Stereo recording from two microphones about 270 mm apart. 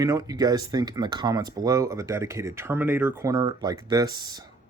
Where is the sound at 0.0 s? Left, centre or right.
Centre.